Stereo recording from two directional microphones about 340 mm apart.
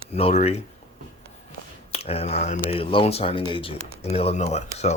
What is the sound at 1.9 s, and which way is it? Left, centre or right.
Speech, centre.